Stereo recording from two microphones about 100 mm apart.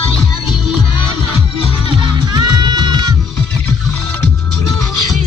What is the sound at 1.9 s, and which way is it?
Music, 50° right (ahead or behind).